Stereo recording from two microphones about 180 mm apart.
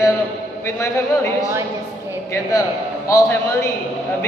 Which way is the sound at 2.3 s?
15° left (ahead or behind).